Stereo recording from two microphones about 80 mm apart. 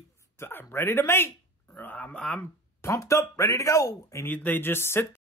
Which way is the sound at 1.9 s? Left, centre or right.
Centre.